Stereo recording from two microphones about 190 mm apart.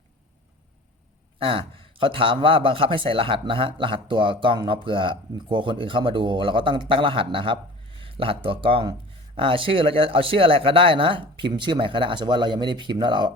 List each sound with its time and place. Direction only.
1.4 s a man's voice: 30° right (ahead or behind)